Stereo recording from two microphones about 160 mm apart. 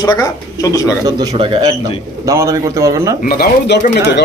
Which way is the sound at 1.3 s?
35° right (ahead or behind).